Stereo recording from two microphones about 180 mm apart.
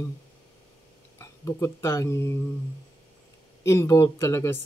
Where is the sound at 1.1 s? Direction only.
15° left (ahead or behind).